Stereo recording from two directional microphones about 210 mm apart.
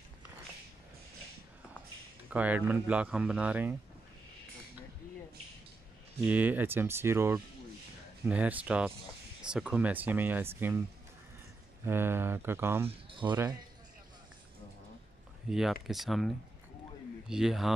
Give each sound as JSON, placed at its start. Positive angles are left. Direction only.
{"t": 2.2, "sound": "speech", "side_deg": -5}
{"t": 6.2, "sound": "speech", "side_deg": -10}
{"t": 11.8, "sound": "speech", "side_deg": -10}
{"t": 12.8, "sound": "speech", "side_deg": -25}
{"t": 15.5, "sound": "speech", "side_deg": 0}